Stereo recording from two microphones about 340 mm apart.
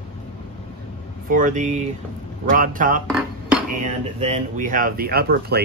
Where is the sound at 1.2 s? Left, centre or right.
Right.